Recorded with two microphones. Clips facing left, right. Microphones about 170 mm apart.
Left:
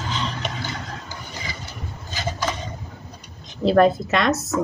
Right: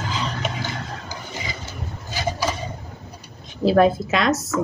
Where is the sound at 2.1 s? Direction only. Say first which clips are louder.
Right 2 dB; 10° right (ahead or behind).